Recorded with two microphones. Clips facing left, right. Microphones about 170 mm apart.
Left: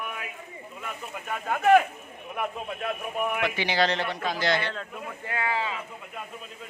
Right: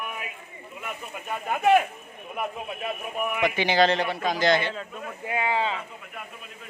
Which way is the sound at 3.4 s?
20° right (ahead or behind).